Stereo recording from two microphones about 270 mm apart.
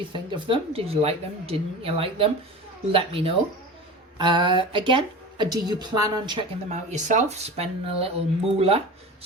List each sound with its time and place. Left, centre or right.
0.1 s speech: centre